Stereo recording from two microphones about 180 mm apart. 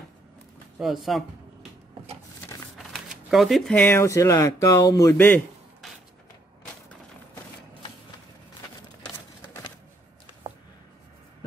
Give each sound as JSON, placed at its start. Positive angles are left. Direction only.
{"t": 0.7, "sound": "speech", "side_deg": 0}
{"t": 2.8, "sound": "speech", "side_deg": 0}
{"t": 5.2, "sound": "a sound", "side_deg": 5}